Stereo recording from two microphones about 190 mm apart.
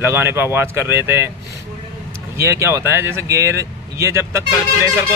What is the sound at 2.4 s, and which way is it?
Speech, 15° right (ahead or behind).